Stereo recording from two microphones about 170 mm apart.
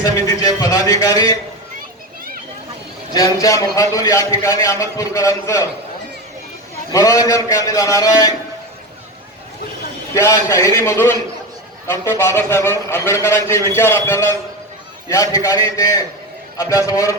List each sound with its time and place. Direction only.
0.0 s a man's voice: 20° left (ahead or behind)
3.1 s a man's voice: 20° left (ahead or behind)
6.9 s a man's voice: 20° left (ahead or behind)
10.2 s a man's voice: 20° left (ahead or behind)